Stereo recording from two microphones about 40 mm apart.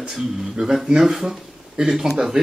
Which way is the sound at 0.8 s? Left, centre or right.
Centre.